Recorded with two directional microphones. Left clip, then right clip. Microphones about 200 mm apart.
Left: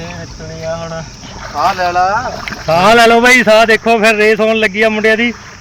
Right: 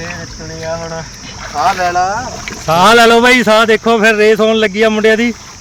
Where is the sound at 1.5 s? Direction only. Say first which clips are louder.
Even; 30° left (ahead or behind).